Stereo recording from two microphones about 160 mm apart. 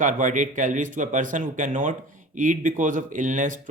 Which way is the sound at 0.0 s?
55° right (ahead or behind).